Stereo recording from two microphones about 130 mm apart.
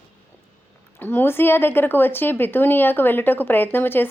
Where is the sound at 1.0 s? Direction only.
15° left (ahead or behind).